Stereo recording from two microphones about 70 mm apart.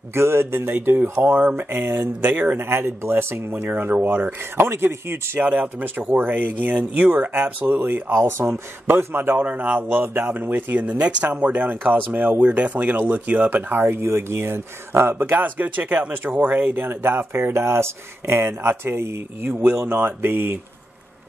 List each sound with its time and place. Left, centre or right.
0.1 s speech: right
3.7 s speech: right
5.4 s speech: right
19.5 s speech: centre
19.8 s speech: right